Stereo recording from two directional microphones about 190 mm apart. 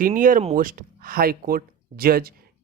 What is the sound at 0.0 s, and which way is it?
Speech, 45° right (ahead or behind).